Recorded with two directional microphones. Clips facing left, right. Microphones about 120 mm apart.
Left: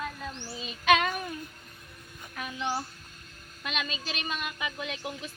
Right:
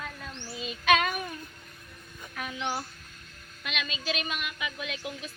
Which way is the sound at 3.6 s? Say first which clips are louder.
Right 1 dB; 40° left (ahead or behind).